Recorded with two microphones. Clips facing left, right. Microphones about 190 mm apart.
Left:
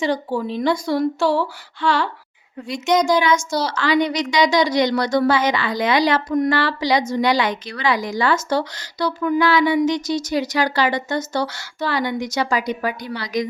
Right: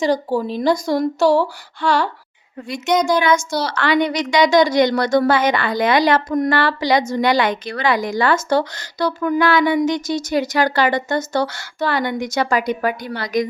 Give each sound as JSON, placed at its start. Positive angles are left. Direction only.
{"t": 0.0, "sound": "speech", "side_deg": -40}
{"t": 2.6, "sound": "a woman's voice", "side_deg": -55}